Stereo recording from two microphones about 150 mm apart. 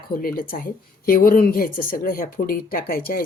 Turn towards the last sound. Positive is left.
turn(degrees=85)